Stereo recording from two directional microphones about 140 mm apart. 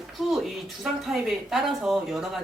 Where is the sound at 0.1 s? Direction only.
Centre (ahead or behind).